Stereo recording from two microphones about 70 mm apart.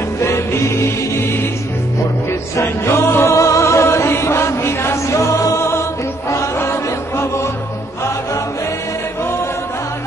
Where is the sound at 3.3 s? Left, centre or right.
Left.